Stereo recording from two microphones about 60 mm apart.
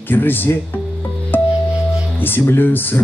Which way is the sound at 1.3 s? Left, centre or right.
Left.